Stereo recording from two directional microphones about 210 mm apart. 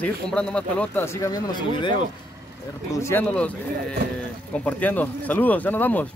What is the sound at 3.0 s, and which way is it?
Speech, 10° left (ahead or behind).